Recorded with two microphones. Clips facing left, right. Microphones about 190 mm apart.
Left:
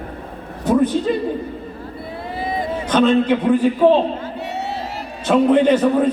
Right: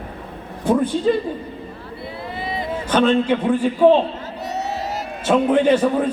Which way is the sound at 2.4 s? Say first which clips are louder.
Left 4 dB; 45° left (ahead or behind).